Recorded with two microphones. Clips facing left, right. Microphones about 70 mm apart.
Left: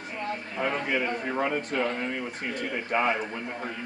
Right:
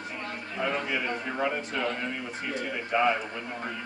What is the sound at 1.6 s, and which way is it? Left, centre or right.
A man's voice, left.